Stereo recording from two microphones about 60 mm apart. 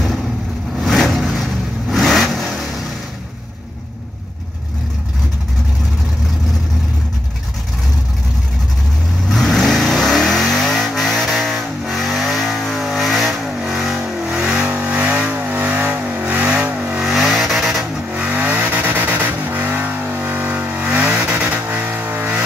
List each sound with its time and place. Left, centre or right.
0.7 s vehicle: centre
9.3 s vehicle: centre; by 17.0 s right
17.0 s vehicle: centre
18.1 s vehicle: right
20.8 s vehicle: centre; by 22.3 s right